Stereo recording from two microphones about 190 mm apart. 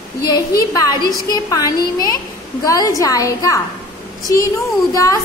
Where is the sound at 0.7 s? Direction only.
20° left (ahead or behind).